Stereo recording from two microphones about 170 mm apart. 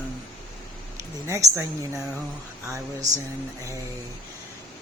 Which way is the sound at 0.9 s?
20° right (ahead or behind).